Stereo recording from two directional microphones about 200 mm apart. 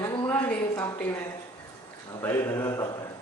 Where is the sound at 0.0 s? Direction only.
20° left (ahead or behind).